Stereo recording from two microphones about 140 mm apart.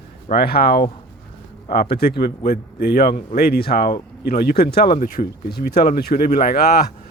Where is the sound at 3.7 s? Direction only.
80° left.